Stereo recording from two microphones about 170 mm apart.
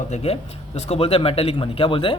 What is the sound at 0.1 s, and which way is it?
A man's voice, 35° left (ahead or behind).